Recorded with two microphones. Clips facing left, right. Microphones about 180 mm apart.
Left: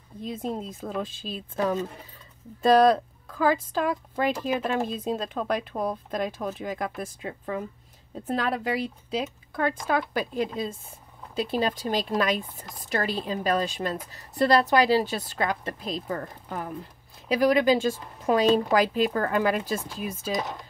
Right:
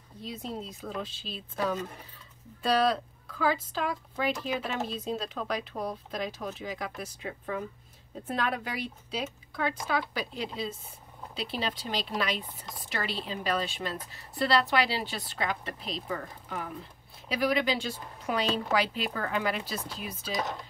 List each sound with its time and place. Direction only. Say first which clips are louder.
0.2 s speech: left 6 dB; 50° left (ahead or behind)
7.2 s speech: left 2 dB; 35° left (ahead or behind)